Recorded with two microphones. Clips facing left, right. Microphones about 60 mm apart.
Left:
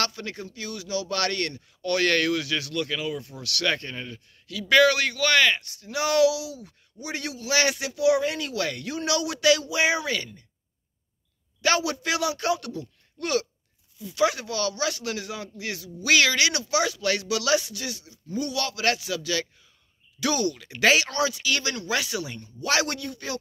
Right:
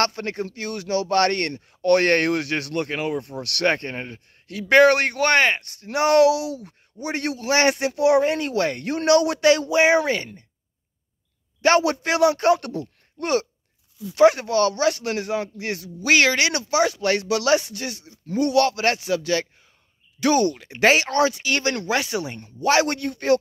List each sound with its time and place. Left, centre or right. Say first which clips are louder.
0.0 s a man's voice: right 6 dB; right
11.6 s a man's voice: right 6 dB; right
13.2 s a man's voice: right 4 dB; right
18.2 s a man's voice: right 10 dB; right
22.9 s a man's voice: right 10 dB; right